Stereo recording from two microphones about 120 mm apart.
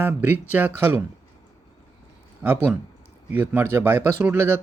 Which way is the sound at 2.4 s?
15° right (ahead or behind).